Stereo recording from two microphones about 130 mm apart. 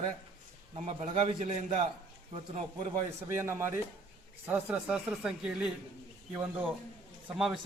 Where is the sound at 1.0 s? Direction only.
55° right (ahead or behind).